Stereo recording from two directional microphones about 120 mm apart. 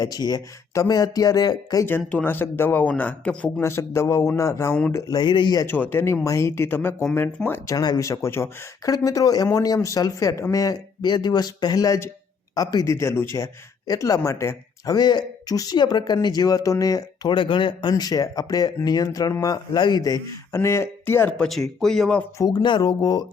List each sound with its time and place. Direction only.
0.0 s speech: 35° left (ahead or behind)
2.0 s speech: 15° left (ahead or behind)
3.6 s speech: 20° left (ahead or behind); by 5.6 s 40° left (ahead or behind)
5.6 s speech: 15° left (ahead or behind)
7.7 s speech: 30° left (ahead or behind)
21.3 s speech: 5° left (ahead or behind)
22.4 s speech: 35° left (ahead or behind)